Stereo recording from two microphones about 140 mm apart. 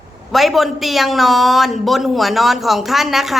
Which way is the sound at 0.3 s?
Centre (ahead or behind).